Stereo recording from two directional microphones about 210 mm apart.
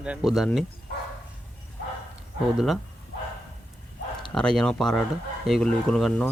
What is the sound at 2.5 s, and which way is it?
Speech, centre (ahead or behind).